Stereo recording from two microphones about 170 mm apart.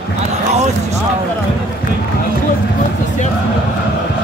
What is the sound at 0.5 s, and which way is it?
Basketball bounce, 40° right (ahead or behind).